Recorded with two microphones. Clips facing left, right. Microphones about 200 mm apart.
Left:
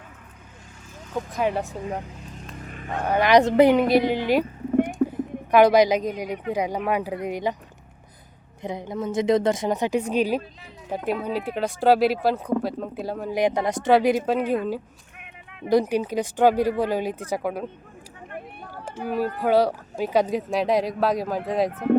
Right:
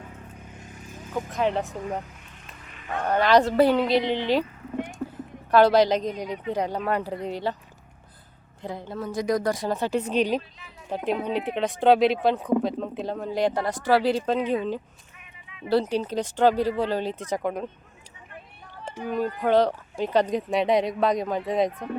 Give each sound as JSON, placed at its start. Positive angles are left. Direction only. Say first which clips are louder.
{"t": 1.3, "sound": "speech", "louder": "even", "side_deg": 5}
{"t": 2.9, "sound": "speech", "louder": "left 2 dB", "side_deg": 10}
{"t": 4.9, "sound": "a sound", "louder": "left 10 dB", "side_deg": 15}
{"t": 6.5, "sound": "speech", "louder": "left 2 dB", "side_deg": 10}
{"t": 8.6, "sound": "speech", "louder": "left 4 dB", "side_deg": 20}
{"t": 15.2, "sound": "a sound", "louder": "left 3 dB", "side_deg": 55}
{"t": 15.7, "sound": "speech", "louder": "left 3 dB", "side_deg": 10}
{"t": 18.3, "sound": "a sound", "louder": "left 9 dB", "side_deg": 60}
{"t": 19.0, "sound": "speech", "louder": "left 1 dB", "side_deg": 5}